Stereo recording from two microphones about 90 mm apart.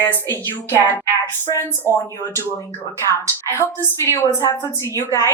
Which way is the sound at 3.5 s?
30° left (ahead or behind).